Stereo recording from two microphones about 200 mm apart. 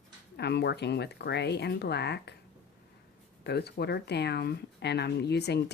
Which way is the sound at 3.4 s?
55° left (ahead or behind).